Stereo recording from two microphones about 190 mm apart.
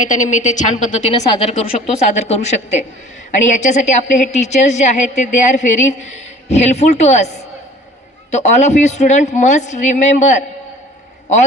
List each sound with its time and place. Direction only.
0.0 s a woman's voice: 40° left (ahead or behind)